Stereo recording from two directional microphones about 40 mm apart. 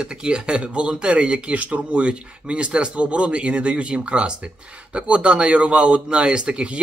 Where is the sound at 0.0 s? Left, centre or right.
Right.